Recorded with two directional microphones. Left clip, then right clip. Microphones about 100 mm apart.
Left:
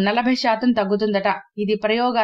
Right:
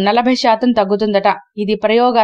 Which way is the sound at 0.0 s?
40° right (ahead or behind).